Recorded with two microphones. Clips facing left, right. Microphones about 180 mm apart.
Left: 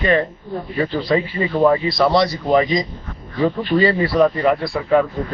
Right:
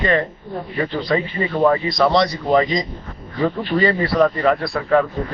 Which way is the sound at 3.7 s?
15° right (ahead or behind).